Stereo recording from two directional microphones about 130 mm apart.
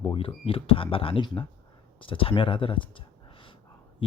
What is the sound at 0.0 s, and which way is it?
Speech, 40° left (ahead or behind).